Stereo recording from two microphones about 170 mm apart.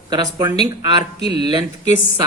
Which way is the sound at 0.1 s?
25° right (ahead or behind).